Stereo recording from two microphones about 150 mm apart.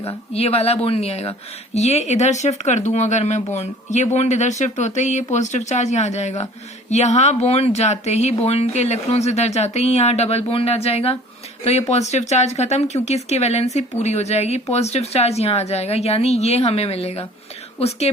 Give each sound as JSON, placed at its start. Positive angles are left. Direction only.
{"t": 0.3, "sound": "speech", "side_deg": 45}